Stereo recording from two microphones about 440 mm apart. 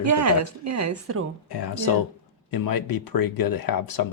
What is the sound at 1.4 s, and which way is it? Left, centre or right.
Speech, left.